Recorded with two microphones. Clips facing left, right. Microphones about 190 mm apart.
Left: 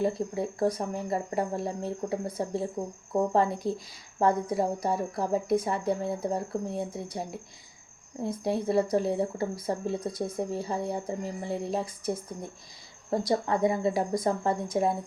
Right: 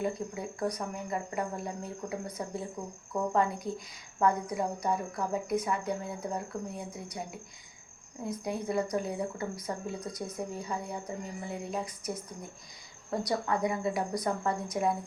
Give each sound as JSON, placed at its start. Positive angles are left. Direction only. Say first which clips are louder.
{"t": 0.0, "sound": "a woman's voice", "louder": "left 5 dB", "side_deg": 30}